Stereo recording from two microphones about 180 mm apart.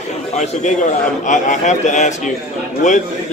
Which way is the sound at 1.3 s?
45° left (ahead or behind).